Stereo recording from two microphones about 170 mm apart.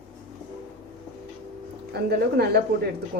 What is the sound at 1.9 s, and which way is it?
Speech, 70° right (ahead or behind).